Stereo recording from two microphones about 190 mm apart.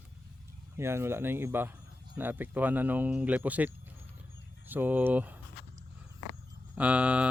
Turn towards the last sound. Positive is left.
turn(degrees=-5)  # may be behind; listen again after turning